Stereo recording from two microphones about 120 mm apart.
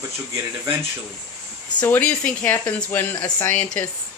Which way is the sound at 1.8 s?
10° left (ahead or behind).